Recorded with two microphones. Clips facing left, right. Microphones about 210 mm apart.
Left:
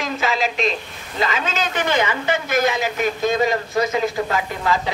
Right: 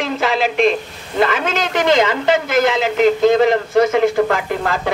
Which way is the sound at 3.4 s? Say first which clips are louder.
Right 6 dB; 60° right (ahead or behind).